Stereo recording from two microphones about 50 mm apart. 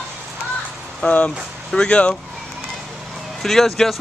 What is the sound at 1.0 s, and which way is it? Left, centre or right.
Speech, left.